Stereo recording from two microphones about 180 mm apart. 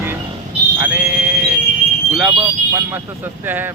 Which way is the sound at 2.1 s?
5° right (ahead or behind).